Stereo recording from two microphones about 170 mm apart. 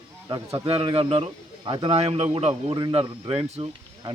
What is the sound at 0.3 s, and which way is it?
A man's voice, 25° right (ahead or behind).